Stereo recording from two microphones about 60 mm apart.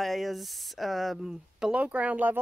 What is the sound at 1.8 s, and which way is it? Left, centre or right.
Speech, right.